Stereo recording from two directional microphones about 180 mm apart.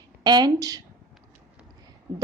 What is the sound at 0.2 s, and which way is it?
Speech, 20° right (ahead or behind).